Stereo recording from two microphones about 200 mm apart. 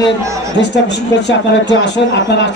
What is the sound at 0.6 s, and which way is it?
Speech, 60° left (ahead or behind).